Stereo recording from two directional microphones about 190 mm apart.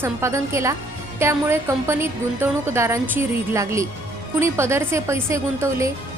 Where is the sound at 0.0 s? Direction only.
15° right (ahead or behind).